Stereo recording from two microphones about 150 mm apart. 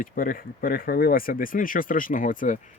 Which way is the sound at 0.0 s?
65° left (ahead or behind).